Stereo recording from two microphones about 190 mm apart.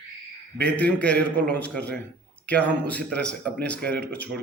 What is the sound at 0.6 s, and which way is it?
A man's voice, 10° left (ahead or behind).